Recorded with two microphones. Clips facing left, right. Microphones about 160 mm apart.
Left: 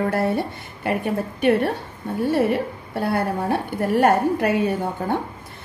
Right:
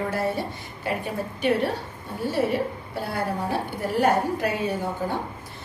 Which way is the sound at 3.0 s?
60° left (ahead or behind).